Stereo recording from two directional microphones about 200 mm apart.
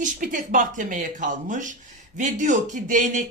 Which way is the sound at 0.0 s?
40° right (ahead or behind).